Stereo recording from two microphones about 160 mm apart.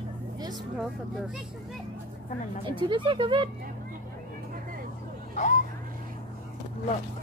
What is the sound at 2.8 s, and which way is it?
Speech, 30° right (ahead or behind).